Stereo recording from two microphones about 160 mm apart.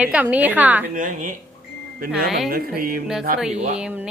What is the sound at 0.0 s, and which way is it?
Speech, 10° right (ahead or behind).